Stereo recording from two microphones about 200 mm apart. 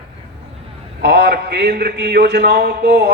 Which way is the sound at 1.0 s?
55° right (ahead or behind).